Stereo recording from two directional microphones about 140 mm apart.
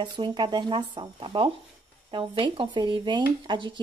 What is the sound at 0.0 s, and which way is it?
Speech, 35° right (ahead or behind).